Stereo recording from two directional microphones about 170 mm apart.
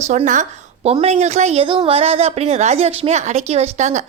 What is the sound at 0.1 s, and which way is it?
Speech, 45° right (ahead or behind).